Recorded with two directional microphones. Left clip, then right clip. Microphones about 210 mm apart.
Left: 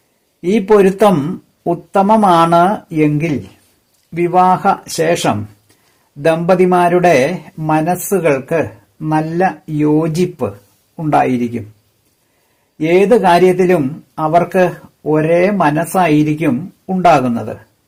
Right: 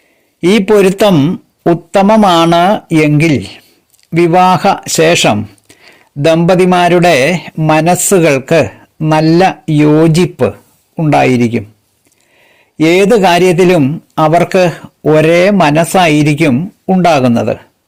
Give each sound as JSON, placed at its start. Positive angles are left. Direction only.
{"t": 0.4, "sound": "a man's voice", "side_deg": -30}
{"t": 12.7, "sound": "speech", "side_deg": -30}